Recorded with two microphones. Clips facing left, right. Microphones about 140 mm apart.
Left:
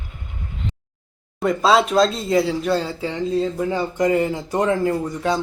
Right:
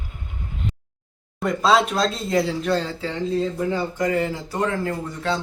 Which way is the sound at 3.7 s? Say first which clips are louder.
Left 3 dB; 20° left (ahead or behind).